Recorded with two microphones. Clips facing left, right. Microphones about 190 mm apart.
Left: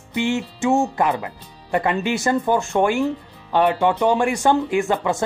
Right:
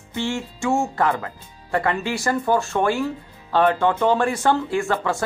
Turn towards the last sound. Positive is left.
turn(degrees=20)  # may be behind; listen again after turning